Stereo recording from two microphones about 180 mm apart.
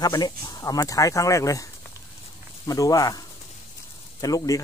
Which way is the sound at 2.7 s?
20° left (ahead or behind).